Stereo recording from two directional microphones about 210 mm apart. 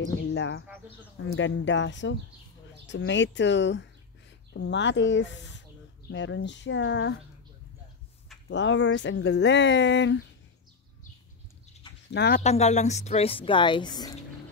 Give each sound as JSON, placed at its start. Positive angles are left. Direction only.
{"t": 0.3, "sound": "speech", "side_deg": 60}
{"t": 8.5, "sound": "speech", "side_deg": 60}
{"t": 12.1, "sound": "speech", "side_deg": 50}
{"t": 12.4, "sound": "a woman's voice", "side_deg": 30}